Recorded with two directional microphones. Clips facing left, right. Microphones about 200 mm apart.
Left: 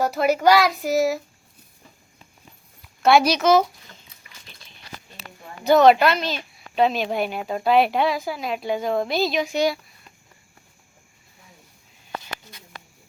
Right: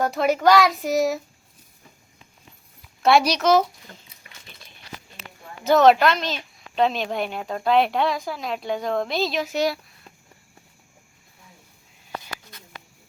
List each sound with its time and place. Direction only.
0.0 s a child's voice: centre (ahead or behind)
3.0 s a child's voice: centre (ahead or behind)
5.6 s a child's voice: centre (ahead or behind)